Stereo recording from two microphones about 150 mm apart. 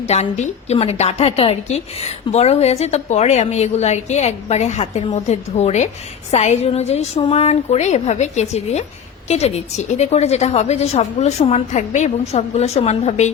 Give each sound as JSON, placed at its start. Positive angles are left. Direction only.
{"t": 0.0, "sound": "a woman's voice", "side_deg": 45}